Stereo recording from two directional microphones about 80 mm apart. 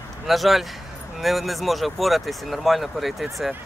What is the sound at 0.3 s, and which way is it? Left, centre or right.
Speech, centre.